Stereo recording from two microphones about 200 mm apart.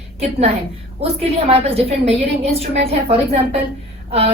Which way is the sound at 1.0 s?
30° right (ahead or behind).